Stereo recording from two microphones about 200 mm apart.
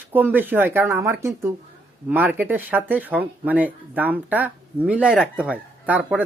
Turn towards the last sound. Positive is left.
turn(degrees=-5)  # may be behind; listen again after turning